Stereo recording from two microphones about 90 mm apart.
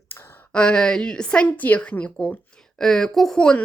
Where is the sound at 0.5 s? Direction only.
10° left (ahead or behind).